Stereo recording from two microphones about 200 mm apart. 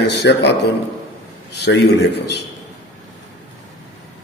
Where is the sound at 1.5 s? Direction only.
55° left (ahead or behind).